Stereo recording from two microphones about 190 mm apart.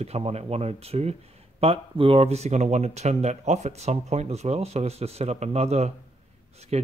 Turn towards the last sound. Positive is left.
turn(degrees=-35)  # may be behind; listen again after turning